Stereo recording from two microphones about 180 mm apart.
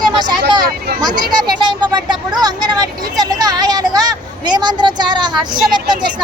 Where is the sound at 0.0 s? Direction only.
25° right (ahead or behind).